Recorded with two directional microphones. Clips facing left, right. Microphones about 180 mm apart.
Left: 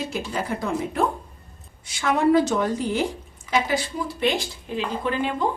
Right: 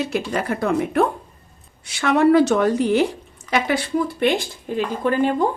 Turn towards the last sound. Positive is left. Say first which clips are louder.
# right 6 dB
turn(degrees=-45)  # may be behind; listen again after turning